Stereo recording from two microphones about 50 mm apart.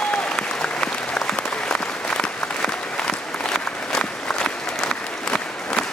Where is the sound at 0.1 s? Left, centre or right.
Centre.